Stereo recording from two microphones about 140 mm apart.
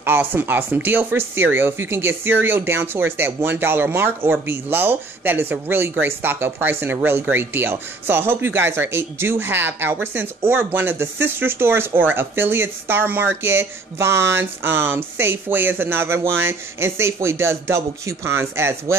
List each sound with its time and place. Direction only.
0.0 s speech: 15° right (ahead or behind)